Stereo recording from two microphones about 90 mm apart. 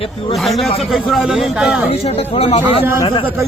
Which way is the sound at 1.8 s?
90° left.